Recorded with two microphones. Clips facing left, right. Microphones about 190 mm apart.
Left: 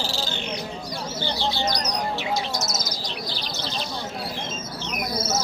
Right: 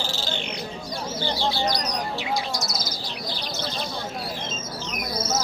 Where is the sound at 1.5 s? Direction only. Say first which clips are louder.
Right 1 dB; 20° left (ahead or behind).